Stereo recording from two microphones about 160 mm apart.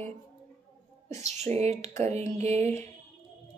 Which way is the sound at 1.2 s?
40° right (ahead or behind).